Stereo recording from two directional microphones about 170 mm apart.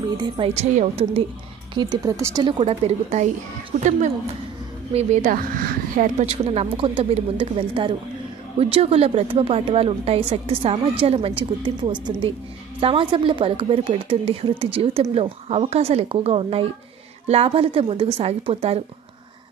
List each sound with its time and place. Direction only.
0.2 s a woman's voice: 35° right (ahead or behind)
2.6 s a woman's voice: 40° right (ahead or behind)
4.9 s a woman's voice: 45° right (ahead or behind)
6.2 s a woman's voice: 35° right (ahead or behind)